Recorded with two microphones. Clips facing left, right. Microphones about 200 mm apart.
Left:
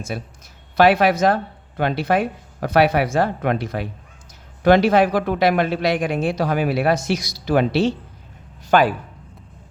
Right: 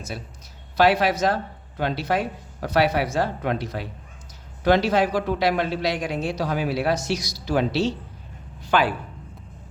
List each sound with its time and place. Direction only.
0.1 s a man's voice: 60° left (ahead or behind)
8.6 s speech: 45° left (ahead or behind)